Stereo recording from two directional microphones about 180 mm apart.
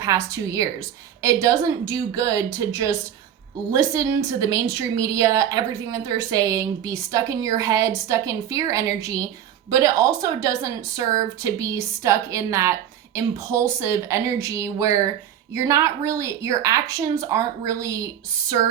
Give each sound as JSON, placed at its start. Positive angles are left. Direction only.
{"t": 0.0, "sound": "a woman's voice", "side_deg": -20}